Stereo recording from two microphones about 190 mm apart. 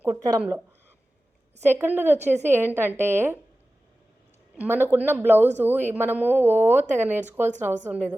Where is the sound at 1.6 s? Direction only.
10° right (ahead or behind).